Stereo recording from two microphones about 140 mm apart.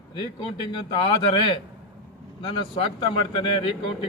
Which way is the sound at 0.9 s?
35° left (ahead or behind).